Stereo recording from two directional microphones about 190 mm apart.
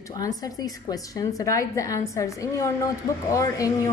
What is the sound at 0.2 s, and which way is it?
A woman's voice, 20° left (ahead or behind).